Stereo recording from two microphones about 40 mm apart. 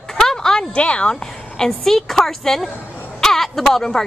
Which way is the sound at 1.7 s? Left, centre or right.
Centre.